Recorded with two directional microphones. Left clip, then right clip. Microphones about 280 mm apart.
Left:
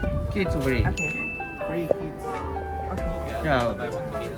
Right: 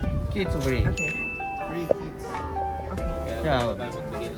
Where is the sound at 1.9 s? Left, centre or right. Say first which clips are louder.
Right 1 dB; left.